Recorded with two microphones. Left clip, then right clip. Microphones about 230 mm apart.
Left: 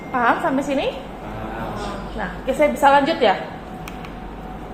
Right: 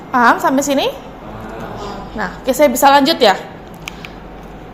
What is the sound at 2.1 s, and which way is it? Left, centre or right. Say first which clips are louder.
A woman's voice: right 6 dB; right.